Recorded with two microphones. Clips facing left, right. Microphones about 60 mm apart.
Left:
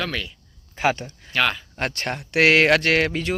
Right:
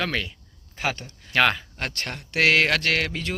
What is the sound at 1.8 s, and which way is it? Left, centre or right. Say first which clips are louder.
Speech: left 5 dB; left.